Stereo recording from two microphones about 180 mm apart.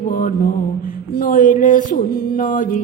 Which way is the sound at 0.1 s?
50° left (ahead or behind).